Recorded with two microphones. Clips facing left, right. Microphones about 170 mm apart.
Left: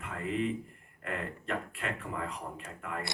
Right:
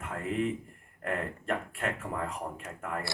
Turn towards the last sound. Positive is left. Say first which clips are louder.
# right 3 dB
turn(degrees=-45)  # may be behind; listen again after turning